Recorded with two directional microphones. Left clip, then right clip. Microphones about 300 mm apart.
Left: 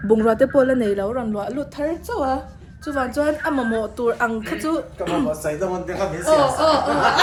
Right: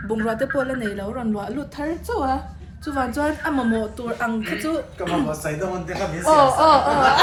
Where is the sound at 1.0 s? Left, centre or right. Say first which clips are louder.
Left 4 dB; centre.